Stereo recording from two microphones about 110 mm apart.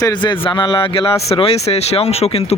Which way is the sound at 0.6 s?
50° left (ahead or behind).